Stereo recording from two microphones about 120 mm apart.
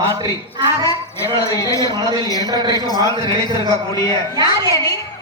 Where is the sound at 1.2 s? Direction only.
25° left (ahead or behind).